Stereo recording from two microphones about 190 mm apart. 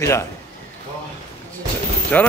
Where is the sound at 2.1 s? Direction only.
10° left (ahead or behind).